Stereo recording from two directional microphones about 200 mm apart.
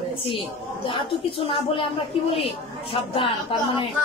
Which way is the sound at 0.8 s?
25° left (ahead or behind).